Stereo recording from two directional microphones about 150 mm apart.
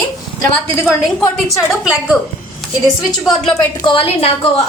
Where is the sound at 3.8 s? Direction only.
40° left (ahead or behind).